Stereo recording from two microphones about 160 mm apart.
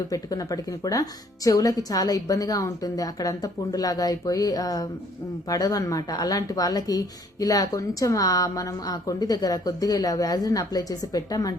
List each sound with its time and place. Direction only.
0.1 s speech: 20° left (ahead or behind)